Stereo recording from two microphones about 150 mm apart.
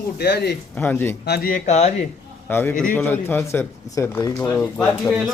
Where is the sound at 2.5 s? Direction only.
15° left (ahead or behind).